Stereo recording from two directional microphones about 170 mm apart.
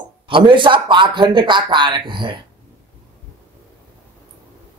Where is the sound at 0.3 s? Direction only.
30° right (ahead or behind).